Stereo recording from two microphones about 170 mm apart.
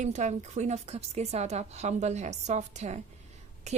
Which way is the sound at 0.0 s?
45° right (ahead or behind).